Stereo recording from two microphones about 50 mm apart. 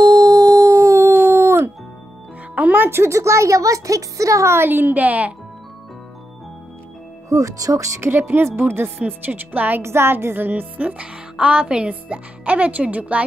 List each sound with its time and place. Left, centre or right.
0.7 s howl: right
2.5 s music: right
2.9 s speech: right
4.6 s speech: right
7.2 s speech: right
8.1 s speech: right
9.0 s speech: right
9.8 s speech: right